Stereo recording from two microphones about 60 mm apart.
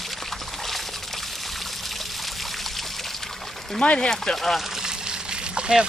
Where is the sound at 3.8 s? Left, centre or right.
Centre.